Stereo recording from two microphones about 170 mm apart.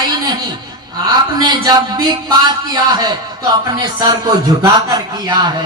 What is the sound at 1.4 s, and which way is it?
A man's voice, 25° right (ahead or behind).